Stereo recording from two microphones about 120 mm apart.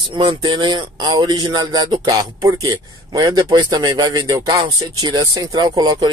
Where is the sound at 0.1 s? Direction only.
40° right (ahead or behind).